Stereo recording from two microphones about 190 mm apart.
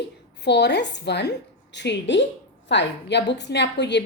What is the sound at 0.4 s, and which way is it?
A woman's voice, 65° left (ahead or behind).